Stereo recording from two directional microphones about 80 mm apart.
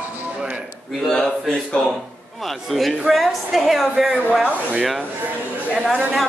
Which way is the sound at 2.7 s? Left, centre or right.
Centre.